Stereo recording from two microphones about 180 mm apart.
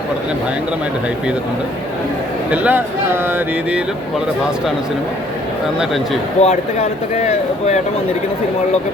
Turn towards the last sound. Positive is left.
turn(degrees=40)  # may be behind; listen again after turning